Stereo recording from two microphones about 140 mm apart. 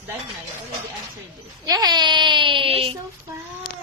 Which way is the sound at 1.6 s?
30° right (ahead or behind).